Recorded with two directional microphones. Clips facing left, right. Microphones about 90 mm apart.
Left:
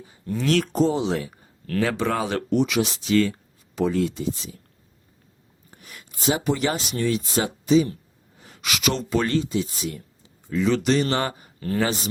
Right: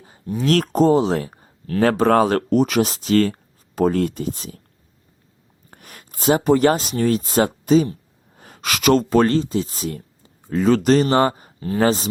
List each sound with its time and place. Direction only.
0.4 s speech: 45° right (ahead or behind)
5.7 s speech: 50° right (ahead or behind)